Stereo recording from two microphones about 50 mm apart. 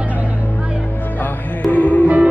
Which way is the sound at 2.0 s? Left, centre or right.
Right.